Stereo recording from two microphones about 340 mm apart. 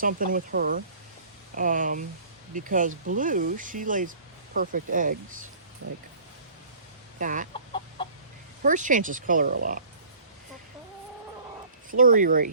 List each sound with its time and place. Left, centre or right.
0.0 s speech: right
7.2 s speech: right
8.6 s speech: right
11.9 s speech: right